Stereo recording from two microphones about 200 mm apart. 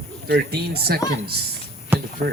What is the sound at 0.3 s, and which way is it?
Speech, 55° right (ahead or behind).